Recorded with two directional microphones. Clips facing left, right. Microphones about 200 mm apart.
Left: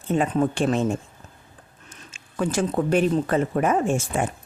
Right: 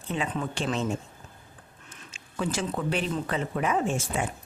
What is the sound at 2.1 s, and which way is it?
Speech, 50° left (ahead or behind).